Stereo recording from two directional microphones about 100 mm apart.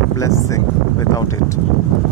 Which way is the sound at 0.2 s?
35° left (ahead or behind).